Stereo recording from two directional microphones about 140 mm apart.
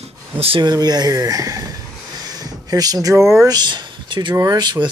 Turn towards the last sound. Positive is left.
turn(degrees=-30)  # may be behind; listen again after turning